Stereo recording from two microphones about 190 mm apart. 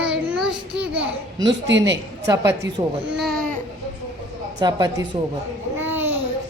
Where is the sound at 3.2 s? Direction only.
Centre (ahead or behind).